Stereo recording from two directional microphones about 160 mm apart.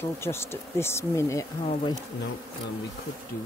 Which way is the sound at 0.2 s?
15° left (ahead or behind).